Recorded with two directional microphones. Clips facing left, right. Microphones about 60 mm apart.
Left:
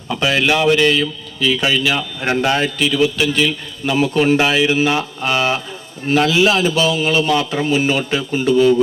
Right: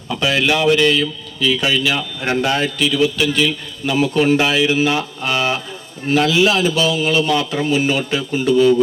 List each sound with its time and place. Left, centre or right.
0.1 s a man's voice: left